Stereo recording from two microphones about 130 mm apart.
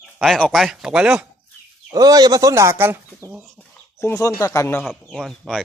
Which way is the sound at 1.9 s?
30° right (ahead or behind).